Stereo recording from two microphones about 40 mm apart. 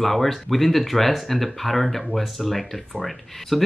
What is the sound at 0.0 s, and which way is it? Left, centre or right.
Speech, centre.